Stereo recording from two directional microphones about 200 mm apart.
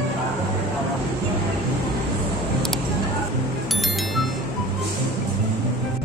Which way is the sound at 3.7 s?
Centre (ahead or behind).